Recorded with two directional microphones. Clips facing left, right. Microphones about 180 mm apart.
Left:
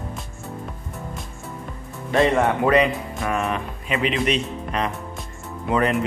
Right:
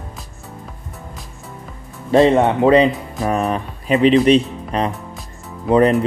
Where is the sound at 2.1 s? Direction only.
30° right (ahead or behind).